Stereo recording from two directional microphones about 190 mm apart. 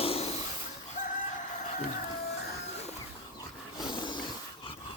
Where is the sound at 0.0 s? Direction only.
30° left (ahead or behind).